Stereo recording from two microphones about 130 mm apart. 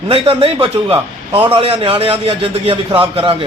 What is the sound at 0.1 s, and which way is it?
A man's voice, 45° right (ahead or behind).